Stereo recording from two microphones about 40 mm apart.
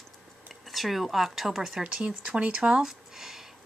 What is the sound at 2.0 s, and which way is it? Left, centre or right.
Speech, right.